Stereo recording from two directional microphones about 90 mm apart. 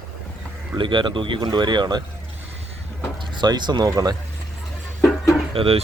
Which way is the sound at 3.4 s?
55° right (ahead or behind).